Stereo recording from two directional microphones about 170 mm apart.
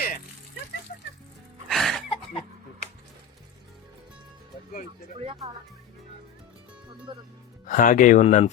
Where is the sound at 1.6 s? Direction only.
Centre (ahead or behind).